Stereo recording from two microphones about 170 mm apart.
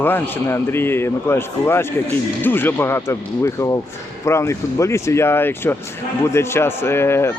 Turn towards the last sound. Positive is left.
turn(degrees=15)  # may be behind; listen again after turning